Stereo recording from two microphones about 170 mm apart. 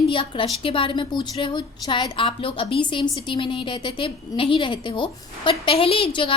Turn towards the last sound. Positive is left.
turn(degrees=30)  # may be behind; listen again after turning